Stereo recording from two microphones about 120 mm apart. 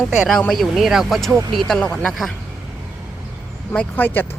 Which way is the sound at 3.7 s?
10° left (ahead or behind).